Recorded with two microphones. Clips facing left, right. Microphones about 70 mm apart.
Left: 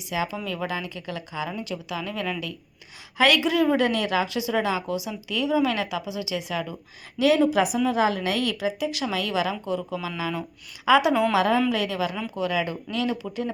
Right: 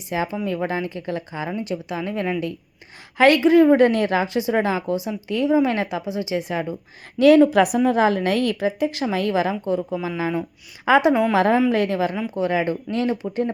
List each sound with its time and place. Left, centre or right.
0.1 s speech: right
7.2 s a woman's voice: right